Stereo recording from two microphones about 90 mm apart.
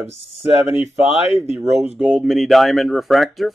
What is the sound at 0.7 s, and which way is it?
Speech, 25° right (ahead or behind).